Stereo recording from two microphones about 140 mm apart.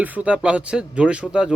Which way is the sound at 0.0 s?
10° right (ahead or behind).